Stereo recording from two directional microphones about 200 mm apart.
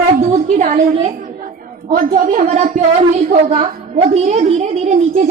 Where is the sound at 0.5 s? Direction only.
35° right (ahead or behind).